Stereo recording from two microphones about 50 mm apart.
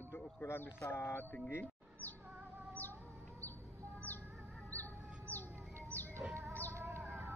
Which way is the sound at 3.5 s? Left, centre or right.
Right.